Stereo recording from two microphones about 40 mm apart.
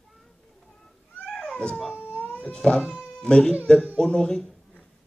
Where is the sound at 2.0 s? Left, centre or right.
Left.